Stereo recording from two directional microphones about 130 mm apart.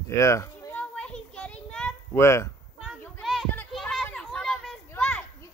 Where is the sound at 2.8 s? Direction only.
Centre (ahead or behind).